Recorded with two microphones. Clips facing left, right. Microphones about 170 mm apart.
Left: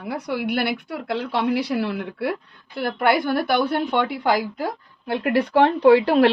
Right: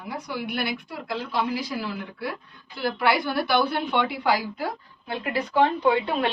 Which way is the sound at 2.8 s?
50° left (ahead or behind).